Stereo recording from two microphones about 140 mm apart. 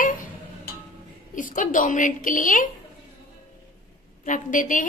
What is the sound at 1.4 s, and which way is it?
A woman's voice, 70° left (ahead or behind).